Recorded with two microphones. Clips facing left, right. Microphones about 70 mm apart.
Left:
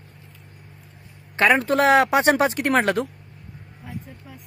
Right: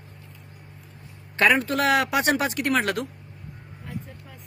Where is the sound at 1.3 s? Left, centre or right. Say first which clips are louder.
Left 3 dB; left.